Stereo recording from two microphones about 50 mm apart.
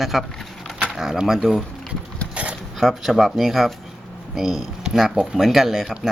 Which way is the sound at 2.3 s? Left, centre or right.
Right.